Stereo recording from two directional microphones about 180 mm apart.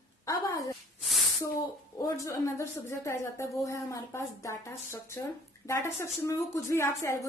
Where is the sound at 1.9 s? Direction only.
20° left (ahead or behind).